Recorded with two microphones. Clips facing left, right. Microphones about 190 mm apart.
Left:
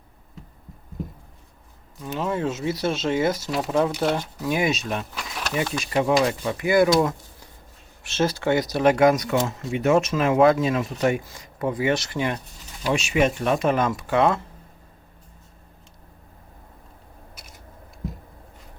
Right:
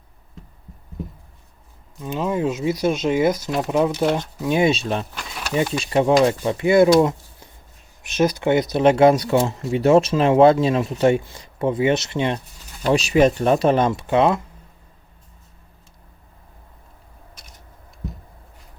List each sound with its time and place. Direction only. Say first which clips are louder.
2.0 s speech: right 3 dB; 15° right (ahead or behind)
12.9 s speech: right 5 dB; 35° right (ahead or behind); by 14.4 s 20° right (ahead or behind)